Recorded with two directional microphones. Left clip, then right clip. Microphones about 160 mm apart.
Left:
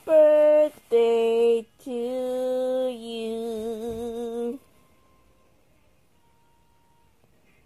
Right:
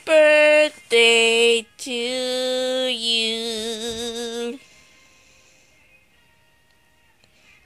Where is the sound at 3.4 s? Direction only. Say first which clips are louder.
Right 4 dB; 30° right (ahead or behind).